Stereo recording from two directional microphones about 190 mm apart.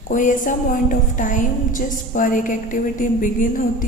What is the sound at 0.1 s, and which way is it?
A woman's voice, 40° left (ahead or behind).